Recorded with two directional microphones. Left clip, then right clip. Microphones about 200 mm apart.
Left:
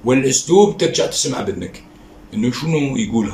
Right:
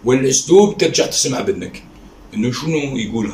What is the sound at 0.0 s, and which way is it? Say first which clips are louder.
Speech: right 1 dB; 5° left (ahead or behind).